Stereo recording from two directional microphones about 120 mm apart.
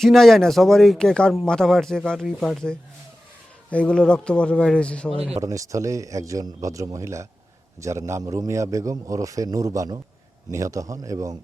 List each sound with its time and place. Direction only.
0.0 s a man's voice: centre (ahead or behind)
5.4 s a man's voice: 25° right (ahead or behind)